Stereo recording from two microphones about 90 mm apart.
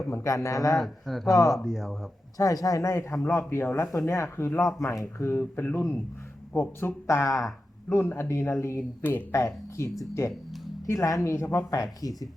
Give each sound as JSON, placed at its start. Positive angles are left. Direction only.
{"t": 0.1, "sound": "speech", "side_deg": 35}
{"t": 0.8, "sound": "speech", "side_deg": 0}
{"t": 2.4, "sound": "speech", "side_deg": 40}